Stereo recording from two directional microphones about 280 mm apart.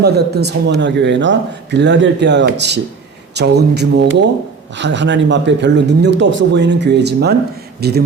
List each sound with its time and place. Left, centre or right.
0.0 s speech: right